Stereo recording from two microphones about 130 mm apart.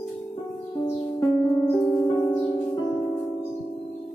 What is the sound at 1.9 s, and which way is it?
Music, 30° left (ahead or behind).